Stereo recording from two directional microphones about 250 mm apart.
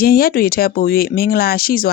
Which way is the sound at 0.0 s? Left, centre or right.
Left.